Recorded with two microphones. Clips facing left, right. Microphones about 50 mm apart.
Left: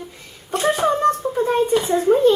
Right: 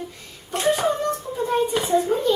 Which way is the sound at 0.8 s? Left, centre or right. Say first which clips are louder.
Left 5 dB; left.